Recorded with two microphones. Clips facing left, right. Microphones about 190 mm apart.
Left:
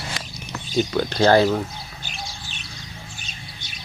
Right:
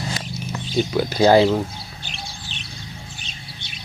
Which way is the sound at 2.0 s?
45° left (ahead or behind).